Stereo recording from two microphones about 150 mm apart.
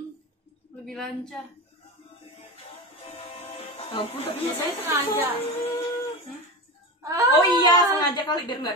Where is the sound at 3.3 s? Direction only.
40° left (ahead or behind).